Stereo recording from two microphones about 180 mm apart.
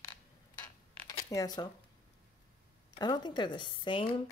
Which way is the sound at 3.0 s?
25° left (ahead or behind).